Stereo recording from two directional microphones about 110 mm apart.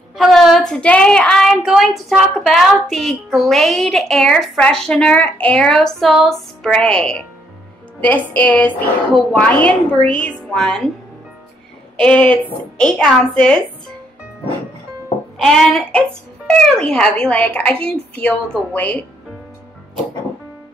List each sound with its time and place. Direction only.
0.2 s speech: centre (ahead or behind)
8.4 s a woman's voice: 15° left (ahead or behind)
12.0 s a woman's voice: 10° left (ahead or behind)
15.4 s a woman's voice: 5° left (ahead or behind)